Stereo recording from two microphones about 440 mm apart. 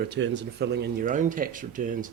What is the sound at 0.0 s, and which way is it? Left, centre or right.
Speech, right.